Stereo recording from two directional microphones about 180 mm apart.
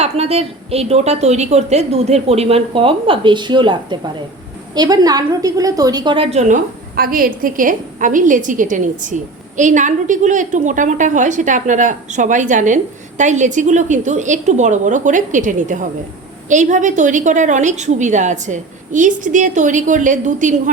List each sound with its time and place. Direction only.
0.0 s a woman's voice: 35° right (ahead or behind)
6.3 s a woman's voice: 40° right (ahead or behind)
6.9 s a woman's voice: 55° right (ahead or behind)